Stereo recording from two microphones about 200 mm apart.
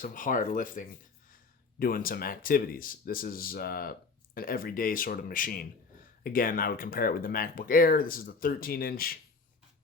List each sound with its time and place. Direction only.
0.0 s speech: 40° left (ahead or behind)